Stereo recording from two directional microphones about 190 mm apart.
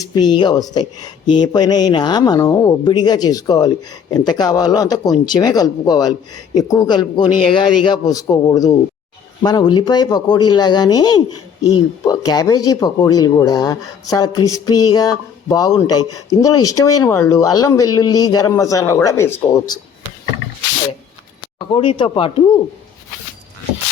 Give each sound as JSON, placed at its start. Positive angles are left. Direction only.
{"t": 0.0, "sound": "speech", "side_deg": 20}
{"t": 21.7, "sound": "speech", "side_deg": 25}